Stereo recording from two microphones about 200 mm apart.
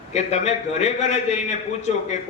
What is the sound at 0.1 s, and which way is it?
A man's voice, 35° left (ahead or behind).